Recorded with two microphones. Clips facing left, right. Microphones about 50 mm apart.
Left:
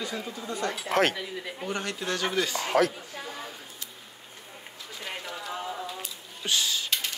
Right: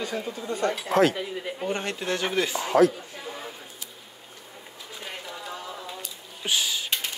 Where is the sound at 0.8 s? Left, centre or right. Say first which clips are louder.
Right 3 dB; left.